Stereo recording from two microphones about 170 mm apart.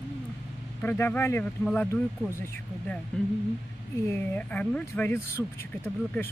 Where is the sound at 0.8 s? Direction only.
15° left (ahead or behind).